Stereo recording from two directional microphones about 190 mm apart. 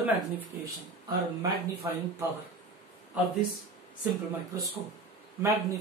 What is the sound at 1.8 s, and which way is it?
Speech, 15° right (ahead or behind).